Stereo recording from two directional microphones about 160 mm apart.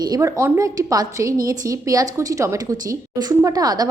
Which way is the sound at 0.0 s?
20° right (ahead or behind).